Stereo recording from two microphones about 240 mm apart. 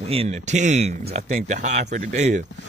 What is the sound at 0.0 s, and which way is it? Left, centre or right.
Speech, right.